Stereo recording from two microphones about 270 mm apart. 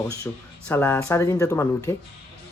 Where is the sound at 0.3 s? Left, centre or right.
Centre.